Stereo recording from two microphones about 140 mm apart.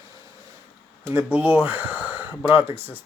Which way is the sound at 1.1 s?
15° right (ahead or behind).